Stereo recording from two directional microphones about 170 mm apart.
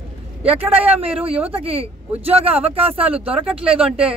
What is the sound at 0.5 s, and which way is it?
A man's voice, 35° right (ahead or behind).